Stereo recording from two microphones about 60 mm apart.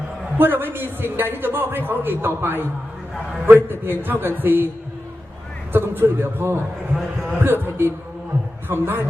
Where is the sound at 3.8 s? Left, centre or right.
Right.